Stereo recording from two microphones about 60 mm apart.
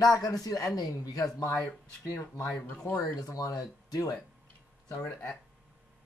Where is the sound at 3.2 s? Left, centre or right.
Left.